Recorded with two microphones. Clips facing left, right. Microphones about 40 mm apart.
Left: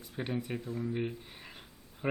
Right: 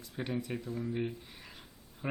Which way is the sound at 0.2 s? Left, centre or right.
Centre.